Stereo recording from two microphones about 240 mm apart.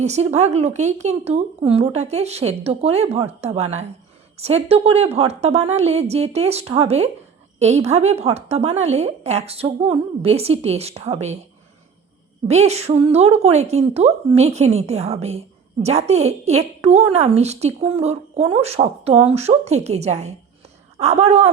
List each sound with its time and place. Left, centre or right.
0.0 s speech: right
12.5 s speech: right